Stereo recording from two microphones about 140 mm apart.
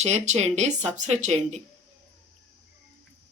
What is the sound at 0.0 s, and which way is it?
Speech, 55° right (ahead or behind).